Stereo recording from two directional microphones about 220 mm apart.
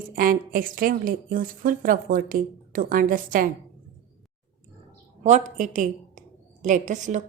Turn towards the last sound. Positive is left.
turn(degrees=-35)  # may be behind; listen again after turning